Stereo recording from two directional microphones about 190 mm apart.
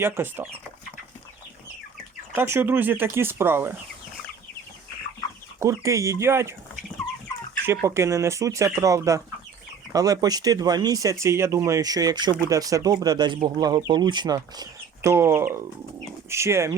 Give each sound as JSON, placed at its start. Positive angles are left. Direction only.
{"t": 0.0, "sound": "speech", "side_deg": -10}
{"t": 2.3, "sound": "speech", "side_deg": -10}
{"t": 5.5, "sound": "speech", "side_deg": -15}
{"t": 7.6, "sound": "speech", "side_deg": -10}